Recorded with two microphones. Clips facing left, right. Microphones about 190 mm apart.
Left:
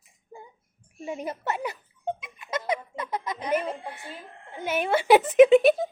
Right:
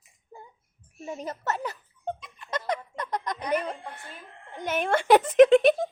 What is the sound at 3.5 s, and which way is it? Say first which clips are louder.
Music: left 2 dB; 5° left (ahead or behind).